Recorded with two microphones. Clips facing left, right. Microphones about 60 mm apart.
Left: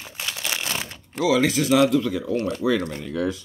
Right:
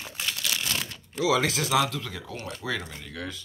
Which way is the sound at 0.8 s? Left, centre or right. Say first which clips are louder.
Left 3 dB; left.